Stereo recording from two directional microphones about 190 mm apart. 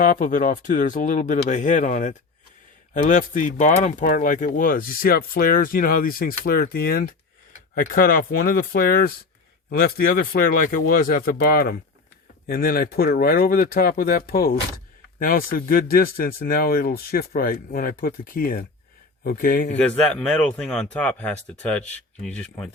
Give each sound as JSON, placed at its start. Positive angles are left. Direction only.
{"t": 0.0, "sound": "speech", "side_deg": 45}
{"t": 10.3, "sound": "speech", "side_deg": 50}
{"t": 19.7, "sound": "speech", "side_deg": 5}